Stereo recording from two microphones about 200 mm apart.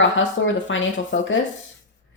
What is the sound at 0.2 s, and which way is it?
Speech, 70° left (ahead or behind).